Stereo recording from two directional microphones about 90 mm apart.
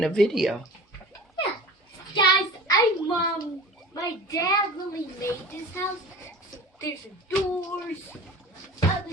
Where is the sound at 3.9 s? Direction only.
40° left (ahead or behind).